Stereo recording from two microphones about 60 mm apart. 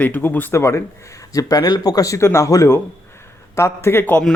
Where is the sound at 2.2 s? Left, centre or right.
Left.